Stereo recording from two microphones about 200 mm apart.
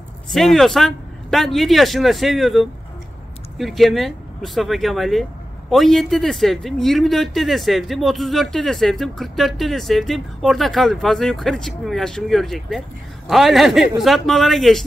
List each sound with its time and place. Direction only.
0.3 s speech: centre (ahead or behind)